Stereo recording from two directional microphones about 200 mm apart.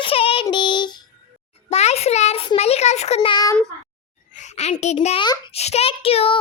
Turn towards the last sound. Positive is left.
turn(degrees=30)  # may be behind; listen again after turning